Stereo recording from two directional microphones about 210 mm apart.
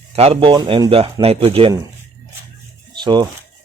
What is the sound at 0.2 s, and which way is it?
A man's voice, 25° right (ahead or behind).